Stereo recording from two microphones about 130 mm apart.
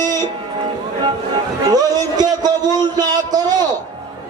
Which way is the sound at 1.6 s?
30° right (ahead or behind).